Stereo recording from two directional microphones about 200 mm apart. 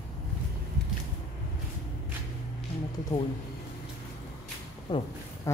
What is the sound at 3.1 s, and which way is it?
Speech, 30° left (ahead or behind).